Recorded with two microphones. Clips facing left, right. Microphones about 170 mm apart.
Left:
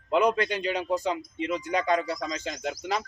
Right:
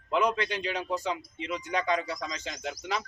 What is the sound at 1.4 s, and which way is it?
Speech, 45° left (ahead or behind).